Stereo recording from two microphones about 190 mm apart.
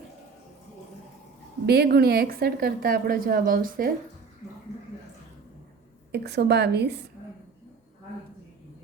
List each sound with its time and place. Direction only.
1.6 s a woman's voice: 55° right (ahead or behind)
6.1 s a woman's voice: 60° right (ahead or behind)